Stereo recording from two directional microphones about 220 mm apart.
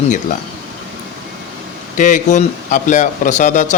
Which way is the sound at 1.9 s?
35° left (ahead or behind).